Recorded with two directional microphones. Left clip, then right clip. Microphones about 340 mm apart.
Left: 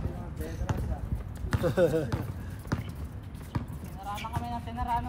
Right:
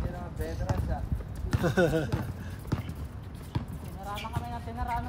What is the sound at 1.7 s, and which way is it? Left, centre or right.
Speech, right.